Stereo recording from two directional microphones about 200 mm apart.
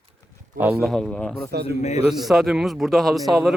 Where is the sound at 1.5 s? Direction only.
55° right (ahead or behind).